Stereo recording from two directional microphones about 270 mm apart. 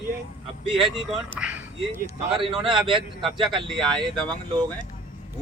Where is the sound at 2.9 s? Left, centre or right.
Centre.